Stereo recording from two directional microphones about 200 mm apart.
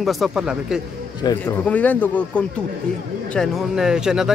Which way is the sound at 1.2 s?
20° left (ahead or behind).